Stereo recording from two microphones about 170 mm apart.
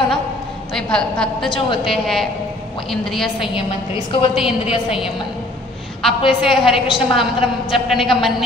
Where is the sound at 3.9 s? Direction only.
30° left (ahead or behind).